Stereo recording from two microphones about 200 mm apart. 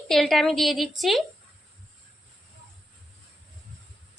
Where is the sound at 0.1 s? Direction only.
Centre (ahead or behind).